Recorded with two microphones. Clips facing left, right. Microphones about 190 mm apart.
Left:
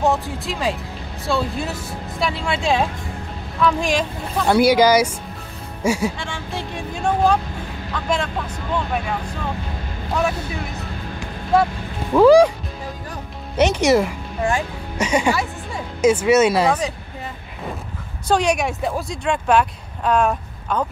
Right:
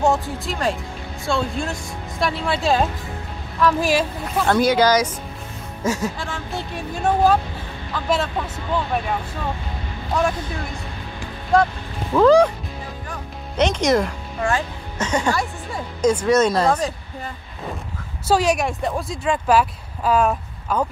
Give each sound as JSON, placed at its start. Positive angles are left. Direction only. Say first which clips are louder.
{"t": 0.0, "sound": "speech", "louder": "even", "side_deg": 0}
{"t": 4.5, "sound": "speech", "louder": "left 3 dB", "side_deg": 10}
{"t": 6.1, "sound": "speech", "louder": "even", "side_deg": 0}
{"t": 12.1, "sound": "speech", "louder": "left 2 dB", "side_deg": 10}
{"t": 13.6, "sound": "speech", "louder": "left 2 dB", "side_deg": 10}
{"t": 18.3, "sound": "speech", "louder": "even", "side_deg": 0}